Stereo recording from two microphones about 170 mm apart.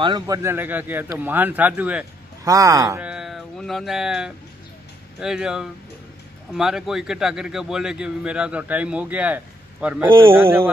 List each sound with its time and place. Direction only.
0.0 s speech: 20° right (ahead or behind)
2.4 s speech: 20° right (ahead or behind)
3.0 s mantra: 5° right (ahead or behind)
5.2 s a man's voice: 5° right (ahead or behind)